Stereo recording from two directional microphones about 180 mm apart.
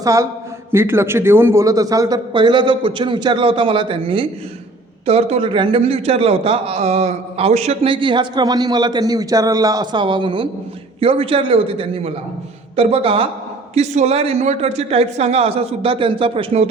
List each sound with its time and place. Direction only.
0.0 s a man's voice: 20° right (ahead or behind)